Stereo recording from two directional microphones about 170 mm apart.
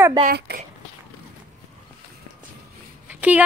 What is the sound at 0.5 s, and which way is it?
Speech, 75° right (ahead or behind).